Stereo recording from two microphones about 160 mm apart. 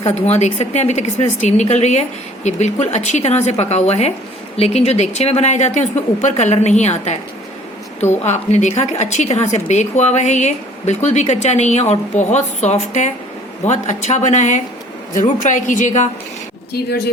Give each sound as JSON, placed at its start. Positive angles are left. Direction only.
{"t": 0.0, "sound": "a woman's voice", "side_deg": 45}
{"t": 8.2, "sound": "a woman's voice", "side_deg": 45}
{"t": 16.7, "sound": "speech", "side_deg": 80}